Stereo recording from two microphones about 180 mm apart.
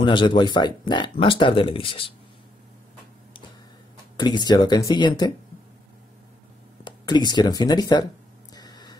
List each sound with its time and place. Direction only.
0.0 s speech: 25° left (ahead or behind)
4.2 s speech: 25° left (ahead or behind)
6.8 s speech: 25° left (ahead or behind)
8.5 s a sound: 25° left (ahead or behind)